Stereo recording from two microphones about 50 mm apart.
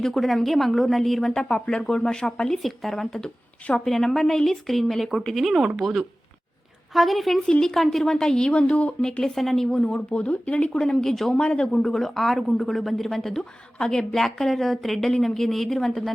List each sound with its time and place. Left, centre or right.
0.0 s speech: centre
1.3 s speech: centre
2.6 s speech: centre; by 9.0 s left
9.2 s speech: centre
9.8 s speech: left; by 11.3 s centre
11.3 s speech: centre